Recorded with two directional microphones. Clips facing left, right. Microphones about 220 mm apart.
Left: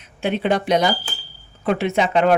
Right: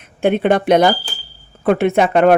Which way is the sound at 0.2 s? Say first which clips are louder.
Right 6 dB; 55° right (ahead or behind).